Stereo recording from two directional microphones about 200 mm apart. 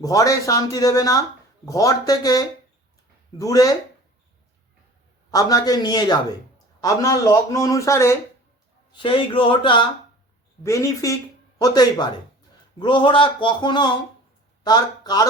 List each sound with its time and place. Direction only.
0.0 s a man's voice: 15° left (ahead or behind)
5.3 s a man's voice: 15° left (ahead or behind)
9.0 s a man's voice: 25° left (ahead or behind)